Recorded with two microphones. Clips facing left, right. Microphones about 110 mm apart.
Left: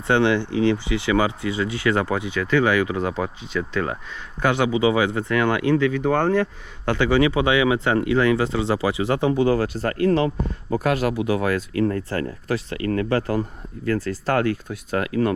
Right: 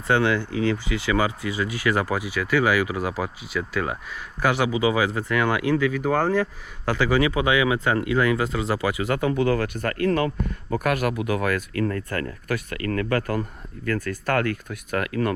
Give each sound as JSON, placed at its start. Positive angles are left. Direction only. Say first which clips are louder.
{"t": 0.1, "sound": "speech", "louder": "left 2 dB", "side_deg": 25}
{"t": 2.3, "sound": "speech", "louder": "left 2 dB", "side_deg": -10}
{"t": 4.4, "sound": "speech", "louder": "left 2 dB", "side_deg": 25}
{"t": 5.9, "sound": "speech", "louder": "left 2 dB", "side_deg": -5}
{"t": 6.8, "sound": "speech", "louder": "left 2 dB", "side_deg": 25}